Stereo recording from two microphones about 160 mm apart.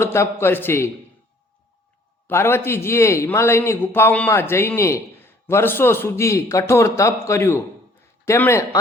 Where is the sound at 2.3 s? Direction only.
15° left (ahead or behind).